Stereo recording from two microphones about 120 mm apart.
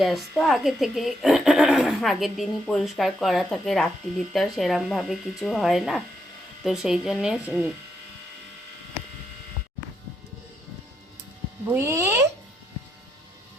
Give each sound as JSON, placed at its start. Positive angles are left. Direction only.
{"t": 0.0, "sound": "a woman's voice", "side_deg": 0}
{"t": 11.7, "sound": "speech", "side_deg": -25}